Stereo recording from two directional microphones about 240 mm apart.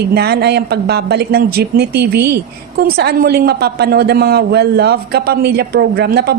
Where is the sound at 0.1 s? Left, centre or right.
Right.